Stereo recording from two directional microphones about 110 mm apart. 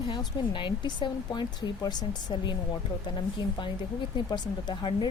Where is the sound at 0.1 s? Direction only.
45° left (ahead or behind).